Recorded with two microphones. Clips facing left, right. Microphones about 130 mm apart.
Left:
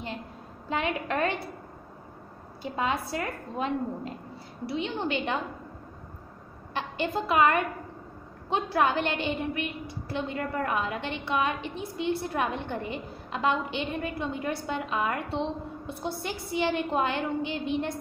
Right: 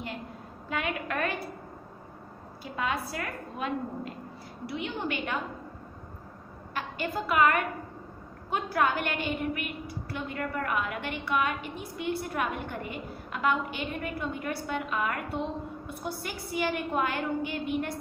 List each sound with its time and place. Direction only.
0.7 s a woman's voice: 25° left (ahead or behind)
2.6 s a woman's voice: 25° left (ahead or behind)
6.7 s a woman's voice: 25° left (ahead or behind)